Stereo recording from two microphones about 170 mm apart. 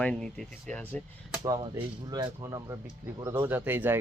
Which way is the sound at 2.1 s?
20° right (ahead or behind).